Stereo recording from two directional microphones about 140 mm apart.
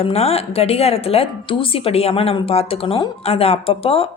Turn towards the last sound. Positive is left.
turn(degrees=40)  # may be behind; listen again after turning